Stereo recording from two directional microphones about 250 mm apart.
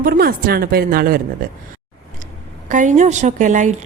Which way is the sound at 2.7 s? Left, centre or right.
Right.